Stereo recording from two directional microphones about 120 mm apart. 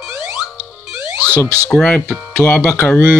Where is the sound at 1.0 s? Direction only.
15° right (ahead or behind).